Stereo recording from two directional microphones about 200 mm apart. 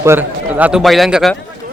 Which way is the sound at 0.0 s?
10° right (ahead or behind).